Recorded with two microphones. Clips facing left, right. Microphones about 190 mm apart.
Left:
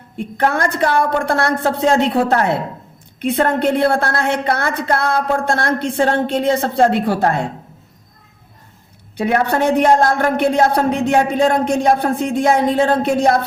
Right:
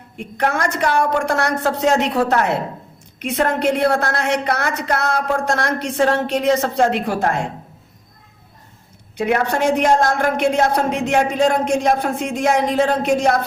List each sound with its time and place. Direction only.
0.2 s a woman's voice: 35° left (ahead or behind)
9.2 s a woman's voice: 35° left (ahead or behind)